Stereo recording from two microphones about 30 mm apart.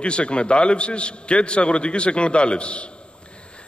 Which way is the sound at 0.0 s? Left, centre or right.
Left.